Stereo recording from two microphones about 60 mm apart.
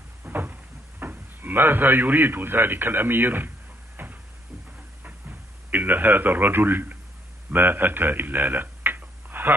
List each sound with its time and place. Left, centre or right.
0.2 s cupboard open or close: right
5.7 s a man's voice: right